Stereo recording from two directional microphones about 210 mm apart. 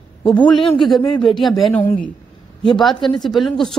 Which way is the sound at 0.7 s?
Centre (ahead or behind).